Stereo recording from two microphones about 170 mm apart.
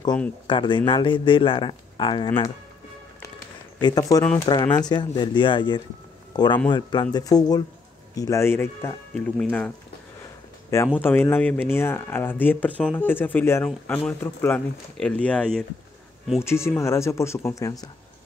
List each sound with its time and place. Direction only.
0.5 s speech: 30° left (ahead or behind)
3.8 s speech: 20° left (ahead or behind)
4.2 s speech: 10° left (ahead or behind)
4.5 s speech: 25° left (ahead or behind); by 9.7 s 5° left (ahead or behind)
11.0 s speech: 10° left (ahead or behind)
16.3 s speech: 15° left (ahead or behind)